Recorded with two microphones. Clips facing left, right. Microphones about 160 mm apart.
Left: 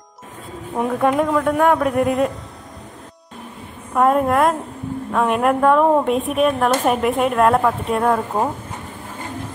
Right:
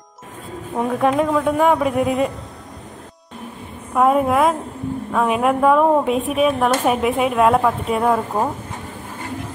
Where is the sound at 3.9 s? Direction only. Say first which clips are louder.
Even; 5° right (ahead or behind).